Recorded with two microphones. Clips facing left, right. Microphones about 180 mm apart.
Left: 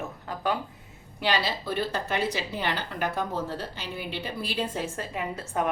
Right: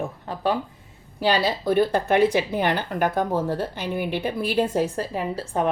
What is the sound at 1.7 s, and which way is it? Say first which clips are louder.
Speech: right 12 dB; 55° right (ahead or behind).